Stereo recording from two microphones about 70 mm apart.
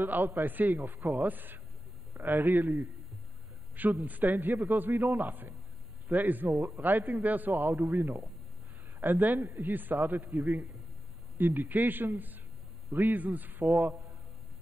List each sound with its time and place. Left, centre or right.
0.0 s a man's voice: right
3.7 s a man's voice: right